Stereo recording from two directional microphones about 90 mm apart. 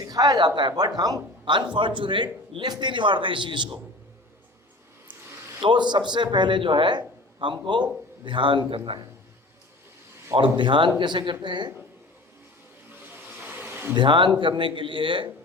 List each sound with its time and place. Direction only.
0.0 s a man's voice: 45° right (ahead or behind); by 3.8 s 60° right (ahead or behind)
5.6 s a man's voice: 60° right (ahead or behind)
10.3 s a man's voice: 65° right (ahead or behind)
13.4 s bee: 20° right (ahead or behind)
13.9 s a man's voice: 60° right (ahead or behind)